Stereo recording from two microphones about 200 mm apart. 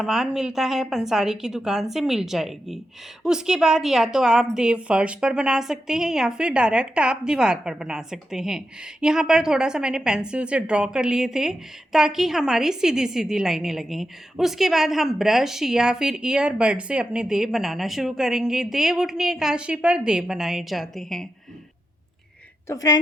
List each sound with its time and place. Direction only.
0.0 s a woman's voice: centre (ahead or behind)
22.6 s a woman's voice: 15° left (ahead or behind)